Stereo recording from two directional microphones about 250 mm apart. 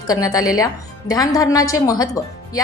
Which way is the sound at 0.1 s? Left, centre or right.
Centre.